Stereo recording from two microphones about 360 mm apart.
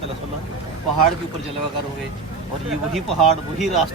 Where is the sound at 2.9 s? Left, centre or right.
Centre.